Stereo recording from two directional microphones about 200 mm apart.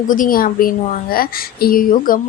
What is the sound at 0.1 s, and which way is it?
A woman's voice, 45° left (ahead or behind).